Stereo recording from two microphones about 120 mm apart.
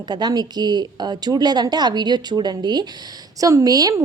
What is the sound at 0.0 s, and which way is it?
A woman's voice, 35° right (ahead or behind).